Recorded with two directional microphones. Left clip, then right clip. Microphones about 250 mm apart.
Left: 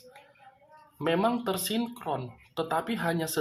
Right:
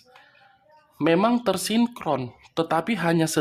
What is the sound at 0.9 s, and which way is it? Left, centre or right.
Speech, right.